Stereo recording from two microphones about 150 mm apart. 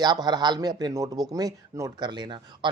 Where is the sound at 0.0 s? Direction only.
30° right (ahead or behind).